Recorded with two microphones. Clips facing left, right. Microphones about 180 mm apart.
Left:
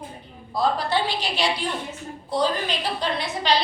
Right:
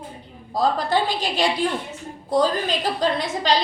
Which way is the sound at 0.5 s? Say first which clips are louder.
Right 2 dB; 45° right (ahead or behind).